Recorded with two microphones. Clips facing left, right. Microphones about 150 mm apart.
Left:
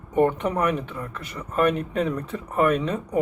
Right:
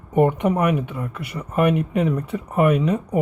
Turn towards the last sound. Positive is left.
turn(degrees=-10)  # may be behind; listen again after turning